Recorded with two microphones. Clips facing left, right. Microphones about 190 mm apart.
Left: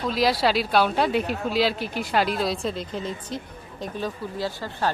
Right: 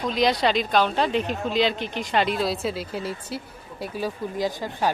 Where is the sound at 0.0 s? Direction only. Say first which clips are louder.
Even; 5° left (ahead or behind).